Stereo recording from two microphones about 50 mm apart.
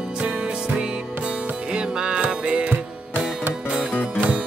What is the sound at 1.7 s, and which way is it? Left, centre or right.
Music, centre.